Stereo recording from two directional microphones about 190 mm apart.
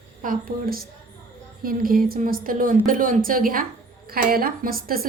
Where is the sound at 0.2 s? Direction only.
45° right (ahead or behind).